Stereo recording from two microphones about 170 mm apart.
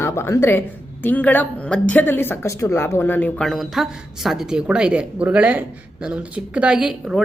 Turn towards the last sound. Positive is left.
turn(degrees=-5)  # may be behind; listen again after turning